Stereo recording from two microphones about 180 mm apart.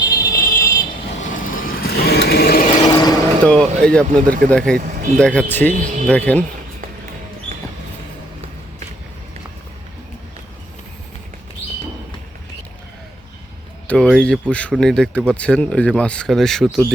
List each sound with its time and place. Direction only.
0.2 s vehicle: 20° left (ahead or behind)
1.2 s vehicle: 45° left (ahead or behind)
2.8 s a sound: 20° left (ahead or behind)
3.4 s speech: 5° left (ahead or behind)
5.7 s speech: 45° right (ahead or behind)
6.1 s speech: 10° left (ahead or behind)
13.8 s speech: 5° left (ahead or behind)